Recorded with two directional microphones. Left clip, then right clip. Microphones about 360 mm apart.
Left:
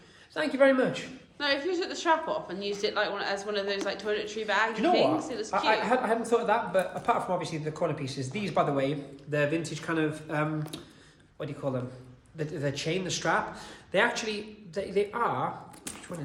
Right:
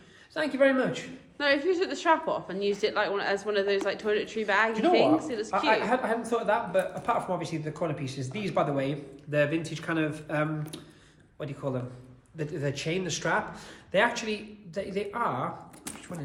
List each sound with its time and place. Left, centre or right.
0.3 s speech: centre
1.4 s a woman's voice: right
5.8 s speech: centre